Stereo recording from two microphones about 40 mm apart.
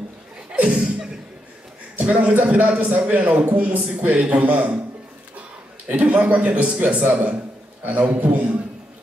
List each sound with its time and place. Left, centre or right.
0.6 s a sound: right
2.0 s a man's voice: right
5.9 s a man's voice: right
8.1 s a man's voice: right